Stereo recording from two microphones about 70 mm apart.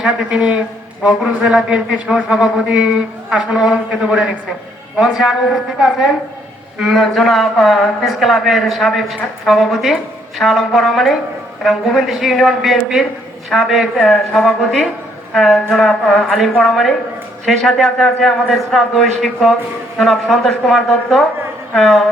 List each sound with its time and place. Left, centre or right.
0.0 s a man's voice: centre